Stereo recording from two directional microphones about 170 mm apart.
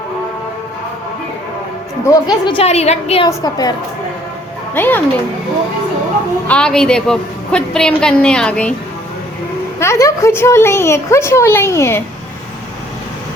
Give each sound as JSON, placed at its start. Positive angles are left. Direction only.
{"t": 2.0, "sound": "a woman's voice", "side_deg": 25}
{"t": 3.2, "sound": "a woman's voice", "side_deg": 20}
{"t": 4.7, "sound": "a woman's voice", "side_deg": 10}
{"t": 6.5, "sound": "a woman's voice", "side_deg": 5}
{"t": 9.8, "sound": "a woman's voice", "side_deg": 15}